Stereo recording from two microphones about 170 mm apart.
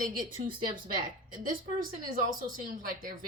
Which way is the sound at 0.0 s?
55° right (ahead or behind).